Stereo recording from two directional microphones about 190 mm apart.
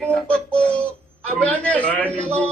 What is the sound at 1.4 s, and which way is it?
Speech, 5° left (ahead or behind).